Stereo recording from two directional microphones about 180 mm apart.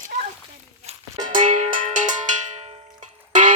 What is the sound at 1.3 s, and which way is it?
Cowbell, 45° right (ahead or behind).